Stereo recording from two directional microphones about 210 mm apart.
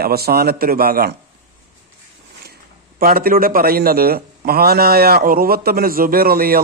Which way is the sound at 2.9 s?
45° right (ahead or behind).